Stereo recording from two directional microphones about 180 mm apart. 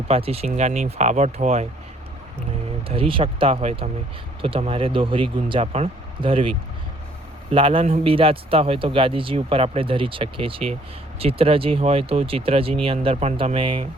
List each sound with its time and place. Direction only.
0.1 s speech: 35° right (ahead or behind)
2.9 s speech: 30° right (ahead or behind)
7.5 s speech: 30° right (ahead or behind)